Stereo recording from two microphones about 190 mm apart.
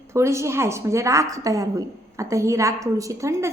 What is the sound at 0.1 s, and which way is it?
A woman's voice, 15° right (ahead or behind).